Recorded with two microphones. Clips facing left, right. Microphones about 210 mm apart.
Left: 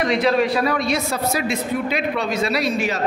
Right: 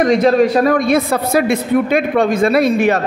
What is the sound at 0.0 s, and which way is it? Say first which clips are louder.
A man's voice: right 7 dB; 45° right (ahead or behind).